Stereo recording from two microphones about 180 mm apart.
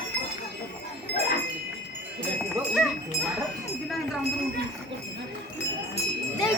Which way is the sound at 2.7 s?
Centre (ahead or behind).